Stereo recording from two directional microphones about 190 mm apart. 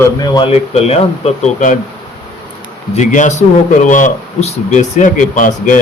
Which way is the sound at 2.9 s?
40° left (ahead or behind).